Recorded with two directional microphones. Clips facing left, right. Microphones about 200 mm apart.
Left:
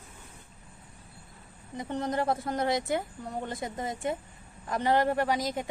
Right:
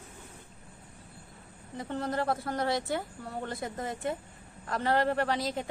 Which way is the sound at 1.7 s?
15° left (ahead or behind).